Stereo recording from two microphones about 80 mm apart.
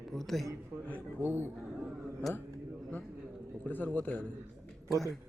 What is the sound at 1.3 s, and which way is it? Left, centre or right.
Speech, right.